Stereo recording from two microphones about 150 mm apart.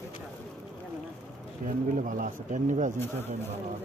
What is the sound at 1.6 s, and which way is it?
Speech, 60° right (ahead or behind).